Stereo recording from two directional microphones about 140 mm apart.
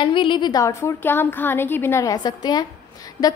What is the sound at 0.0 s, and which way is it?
A woman's voice, 35° left (ahead or behind).